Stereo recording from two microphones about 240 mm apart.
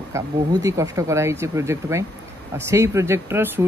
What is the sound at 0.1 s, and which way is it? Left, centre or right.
Speech, centre.